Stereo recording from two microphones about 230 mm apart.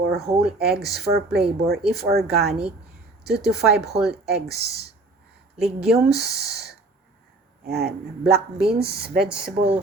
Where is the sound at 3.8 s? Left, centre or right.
Centre.